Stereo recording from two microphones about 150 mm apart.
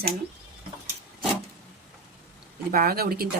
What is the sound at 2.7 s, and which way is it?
Speech, 80° right.